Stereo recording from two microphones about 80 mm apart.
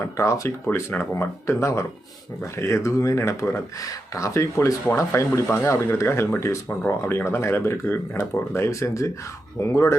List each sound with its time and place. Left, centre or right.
0.0 s speech: left